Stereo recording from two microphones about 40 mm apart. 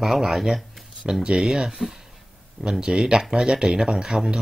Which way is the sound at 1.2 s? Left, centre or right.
Right.